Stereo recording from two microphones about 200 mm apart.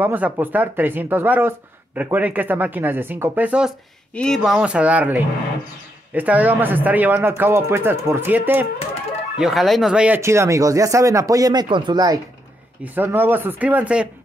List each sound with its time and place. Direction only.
0.0 s speech: 10° right (ahead or behind)